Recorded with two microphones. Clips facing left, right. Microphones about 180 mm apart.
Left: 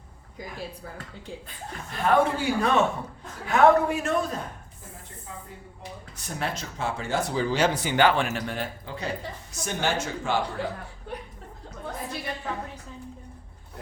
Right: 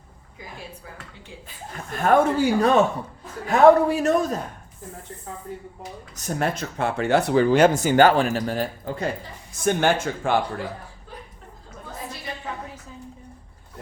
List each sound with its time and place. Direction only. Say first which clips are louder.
1.9 s a man's voice: right 4 dB; 45° right (ahead or behind)
6.1 s speech: right 7 dB; 45° right (ahead or behind)